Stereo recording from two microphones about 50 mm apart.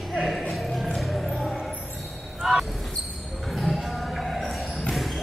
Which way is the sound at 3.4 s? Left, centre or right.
Centre.